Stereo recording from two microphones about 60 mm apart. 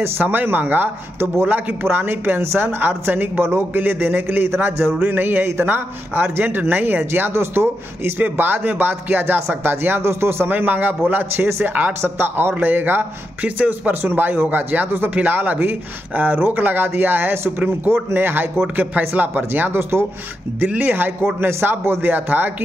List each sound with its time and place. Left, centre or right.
0.0 s speech: right
10.5 s a man's voice: right
11.4 s speech: right
20.6 s speech: right